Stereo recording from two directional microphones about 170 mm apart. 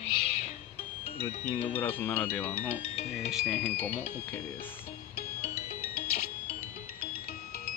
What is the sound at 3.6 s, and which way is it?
Speech, 10° left (ahead or behind).